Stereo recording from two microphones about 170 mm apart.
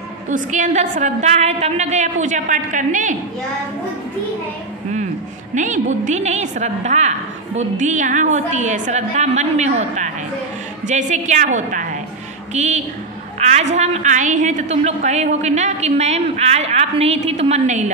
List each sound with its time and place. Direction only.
0.3 s a woman's voice: 45° right (ahead or behind)
5.5 s a woman's voice: 45° right (ahead or behind)